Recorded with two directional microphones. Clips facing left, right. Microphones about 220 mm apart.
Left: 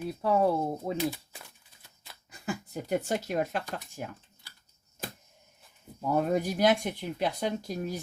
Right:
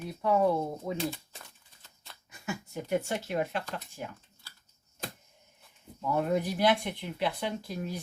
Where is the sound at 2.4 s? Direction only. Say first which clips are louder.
Left 2 dB; 35° left (ahead or behind).